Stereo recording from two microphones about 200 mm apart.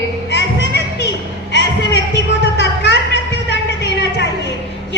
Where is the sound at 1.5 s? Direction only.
60° left (ahead or behind).